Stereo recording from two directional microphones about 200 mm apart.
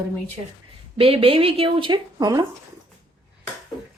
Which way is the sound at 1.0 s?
30° right (ahead or behind).